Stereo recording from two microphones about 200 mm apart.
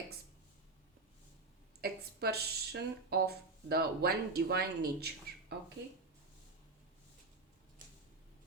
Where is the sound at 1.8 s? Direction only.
50° right (ahead or behind).